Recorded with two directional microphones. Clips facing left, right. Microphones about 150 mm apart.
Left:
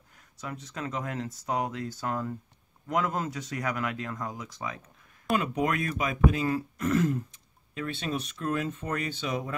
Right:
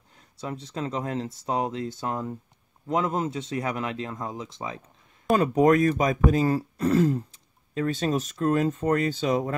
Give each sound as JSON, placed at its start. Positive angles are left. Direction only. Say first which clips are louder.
{"t": 0.4, "sound": "speech", "louder": "right 5 dB", "side_deg": -30}
{"t": 5.3, "sound": "speech", "louder": "right 8 dB", "side_deg": -40}